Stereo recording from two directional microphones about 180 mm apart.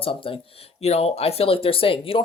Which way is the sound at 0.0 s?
30° left (ahead or behind).